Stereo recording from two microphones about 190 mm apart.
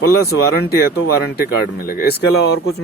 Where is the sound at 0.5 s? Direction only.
55° left (ahead or behind).